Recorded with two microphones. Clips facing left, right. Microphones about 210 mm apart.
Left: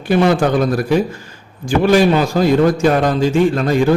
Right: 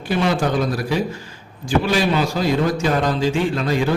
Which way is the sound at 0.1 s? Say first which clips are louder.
Left 7 dB; 55° left (ahead or behind).